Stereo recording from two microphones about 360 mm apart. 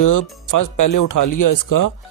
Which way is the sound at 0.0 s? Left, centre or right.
Left.